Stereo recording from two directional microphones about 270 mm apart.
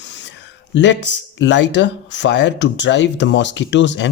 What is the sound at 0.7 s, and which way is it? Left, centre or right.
Speech, left.